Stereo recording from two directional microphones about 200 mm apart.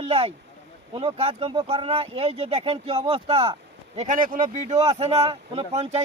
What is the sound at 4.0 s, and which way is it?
Speech, 40° right (ahead or behind).